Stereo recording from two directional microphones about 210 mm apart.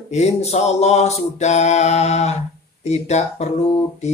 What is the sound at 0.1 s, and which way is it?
Mantra, 30° left (ahead or behind).